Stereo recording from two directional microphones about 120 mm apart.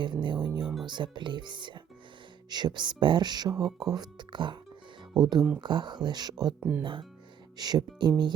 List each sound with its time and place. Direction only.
0.0 s music: 40° right (ahead or behind)
0.9 s speech: 40° right (ahead or behind)
3.6 s speech: centre (ahead or behind)
3.9 s speech: 35° right (ahead or behind)
6.6 s speech: 15° right (ahead or behind)
7.6 s speech: 35° right (ahead or behind)